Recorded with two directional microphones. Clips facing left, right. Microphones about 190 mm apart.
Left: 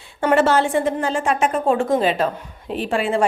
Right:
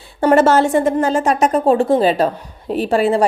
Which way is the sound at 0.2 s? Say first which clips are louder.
Right 4 dB; 40° right (ahead or behind).